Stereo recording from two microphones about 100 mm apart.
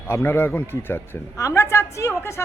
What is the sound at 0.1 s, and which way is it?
A woman's voice, 25° left (ahead or behind).